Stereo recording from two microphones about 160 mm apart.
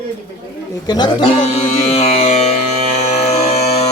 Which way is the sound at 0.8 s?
25° left (ahead or behind).